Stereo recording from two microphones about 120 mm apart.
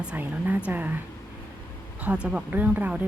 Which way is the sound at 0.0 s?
10° right (ahead or behind).